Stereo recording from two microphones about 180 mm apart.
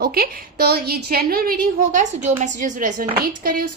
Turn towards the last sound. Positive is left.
turn(degrees=-50)  # may be behind; listen again after turning